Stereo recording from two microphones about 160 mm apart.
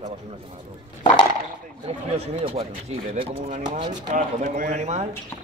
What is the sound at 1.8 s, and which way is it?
Speech, 40° right (ahead or behind).